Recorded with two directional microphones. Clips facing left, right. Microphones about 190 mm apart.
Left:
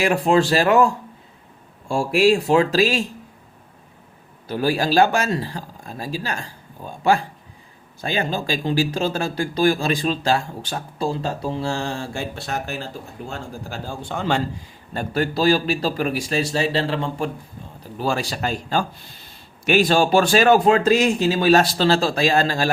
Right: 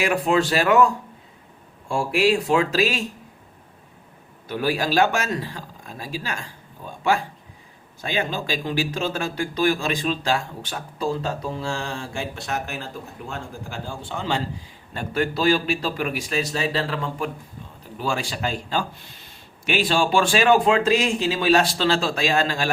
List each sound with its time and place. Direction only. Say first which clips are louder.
0.0 s speech: left 3 dB; 35° left (ahead or behind)
1.9 s speech: left 3 dB; 40° left (ahead or behind)
4.4 s speech: left 3 dB; 35° left (ahead or behind); by 14.4 s 50° left (ahead or behind)
14.9 s speech: left 2 dB; 40° left (ahead or behind)